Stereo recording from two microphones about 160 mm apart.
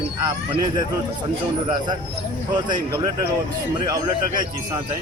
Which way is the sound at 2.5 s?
30° right (ahead or behind).